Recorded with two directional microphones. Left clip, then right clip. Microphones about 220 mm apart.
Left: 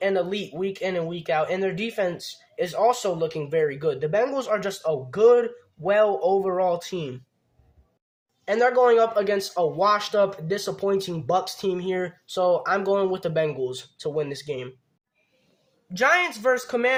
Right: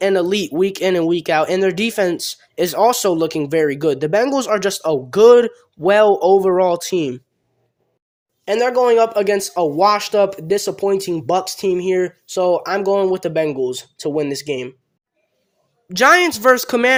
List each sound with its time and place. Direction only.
0.0 s speech: 55° right (ahead or behind)
8.4 s speech: 35° right (ahead or behind)
15.9 s speech: 50° right (ahead or behind)